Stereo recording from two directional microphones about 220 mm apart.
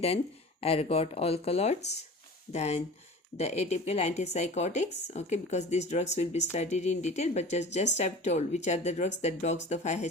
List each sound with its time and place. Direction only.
0.6 s speech: 25° left (ahead or behind)